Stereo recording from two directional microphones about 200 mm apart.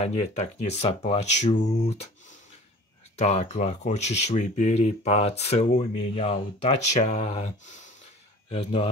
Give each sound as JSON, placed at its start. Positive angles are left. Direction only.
{"t": 0.0, "sound": "speech", "side_deg": 30}
{"t": 3.2, "sound": "speech", "side_deg": 35}